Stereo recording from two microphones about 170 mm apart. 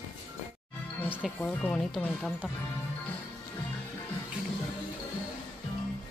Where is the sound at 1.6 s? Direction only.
5° left (ahead or behind).